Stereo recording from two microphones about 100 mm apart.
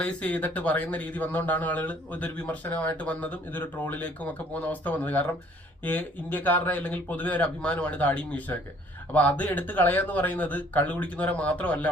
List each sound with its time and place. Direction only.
0.0 s speech: 15° left (ahead or behind)